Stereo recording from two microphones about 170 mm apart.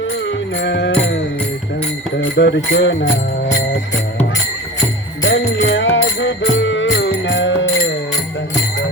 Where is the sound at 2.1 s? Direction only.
90° left.